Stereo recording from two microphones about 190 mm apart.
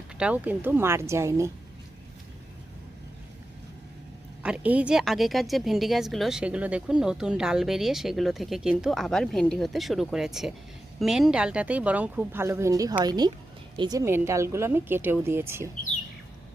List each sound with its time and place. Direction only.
0.2 s speech: 5° right (ahead or behind)
4.4 s a woman's voice: 5° right (ahead or behind)